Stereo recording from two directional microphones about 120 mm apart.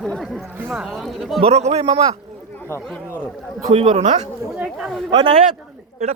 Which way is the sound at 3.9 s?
75° right (ahead or behind).